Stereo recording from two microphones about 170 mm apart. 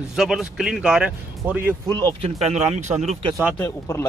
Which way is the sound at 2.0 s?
35° right (ahead or behind).